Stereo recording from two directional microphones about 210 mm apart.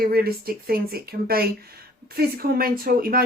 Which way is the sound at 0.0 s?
45° right (ahead or behind).